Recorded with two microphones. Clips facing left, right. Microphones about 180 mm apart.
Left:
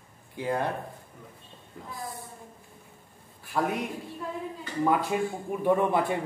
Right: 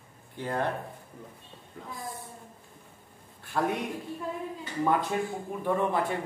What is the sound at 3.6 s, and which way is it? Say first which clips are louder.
Speech: left 1 dB; 5° left (ahead or behind).